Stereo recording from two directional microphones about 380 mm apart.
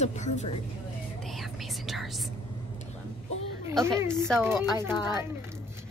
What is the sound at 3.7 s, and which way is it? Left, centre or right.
Speech, centre.